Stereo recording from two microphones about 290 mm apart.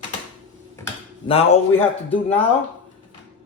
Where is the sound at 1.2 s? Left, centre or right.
Centre.